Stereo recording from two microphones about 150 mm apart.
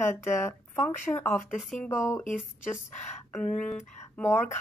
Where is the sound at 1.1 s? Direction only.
20° left (ahead or behind).